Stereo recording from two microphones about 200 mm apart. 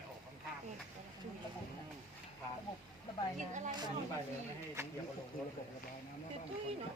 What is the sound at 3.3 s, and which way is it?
Speech, 40° right (ahead or behind).